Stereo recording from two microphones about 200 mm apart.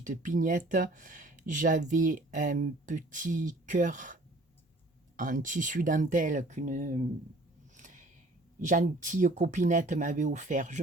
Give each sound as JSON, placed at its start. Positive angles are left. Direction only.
{"t": 0.0, "sound": "speech", "side_deg": -40}
{"t": 7.8, "sound": "a sound", "side_deg": -40}
{"t": 8.6, "sound": "speech", "side_deg": -40}